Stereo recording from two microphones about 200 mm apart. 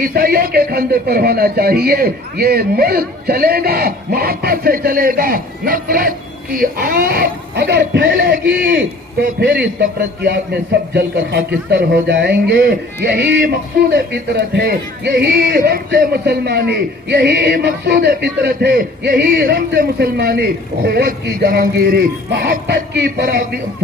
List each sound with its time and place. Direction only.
0.0 s a man's voice: 45° right (ahead or behind)
9.4 s a man's voice: 55° right (ahead or behind)